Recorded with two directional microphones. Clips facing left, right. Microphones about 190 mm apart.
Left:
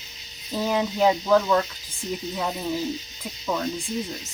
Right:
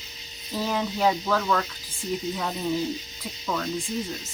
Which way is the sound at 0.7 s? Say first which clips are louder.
Left 3 dB; 15° left (ahead or behind).